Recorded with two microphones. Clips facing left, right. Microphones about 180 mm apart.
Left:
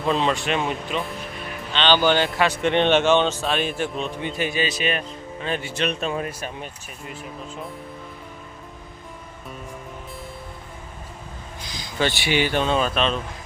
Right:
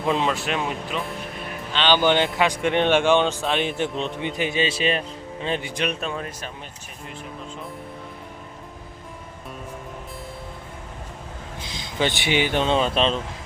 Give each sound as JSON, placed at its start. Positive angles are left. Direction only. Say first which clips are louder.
{"t": 0.0, "sound": "speech", "louder": "even", "side_deg": -15}
{"t": 0.3, "sound": "speech", "louder": "left 2 dB", "side_deg": -5}
{"t": 2.0, "sound": "a man's voice", "louder": "even", "side_deg": -20}
{"t": 6.1, "sound": "speech", "louder": "left 4 dB", "side_deg": 10}
{"t": 11.6, "sound": "speech", "louder": "even", "side_deg": -25}